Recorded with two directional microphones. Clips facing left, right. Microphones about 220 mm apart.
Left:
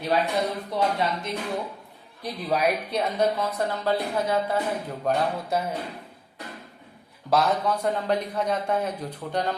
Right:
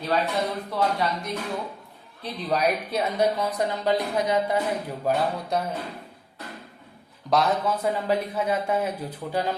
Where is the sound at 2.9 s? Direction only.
5° right (ahead or behind).